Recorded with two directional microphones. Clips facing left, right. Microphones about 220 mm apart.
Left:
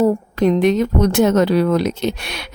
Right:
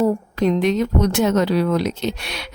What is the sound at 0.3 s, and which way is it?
Speech, 55° left (ahead or behind).